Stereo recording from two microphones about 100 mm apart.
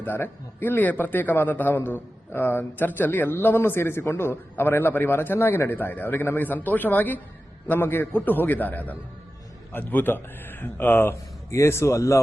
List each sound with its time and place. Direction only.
0.0 s a man's voice: 20° left (ahead or behind)